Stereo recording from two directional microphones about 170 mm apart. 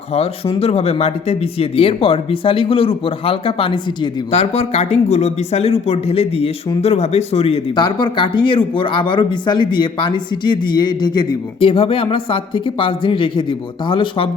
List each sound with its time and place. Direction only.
0.1 s speech: 35° left (ahead or behind)